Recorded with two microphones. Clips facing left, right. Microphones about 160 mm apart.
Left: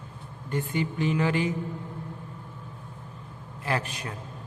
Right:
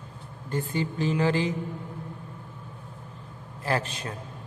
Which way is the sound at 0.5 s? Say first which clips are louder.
Even; 35° right (ahead or behind).